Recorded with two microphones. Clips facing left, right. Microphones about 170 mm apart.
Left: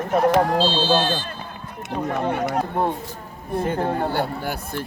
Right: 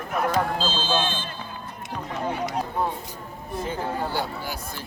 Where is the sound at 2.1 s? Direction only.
55° left (ahead or behind).